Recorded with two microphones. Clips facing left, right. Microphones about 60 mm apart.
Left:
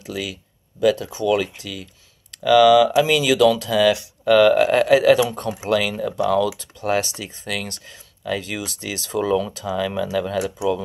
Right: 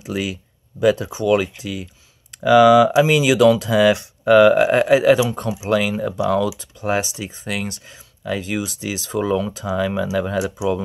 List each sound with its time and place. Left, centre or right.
0.0 s speech: right